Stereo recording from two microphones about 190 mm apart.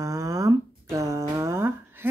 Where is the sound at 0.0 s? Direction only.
15° right (ahead or behind).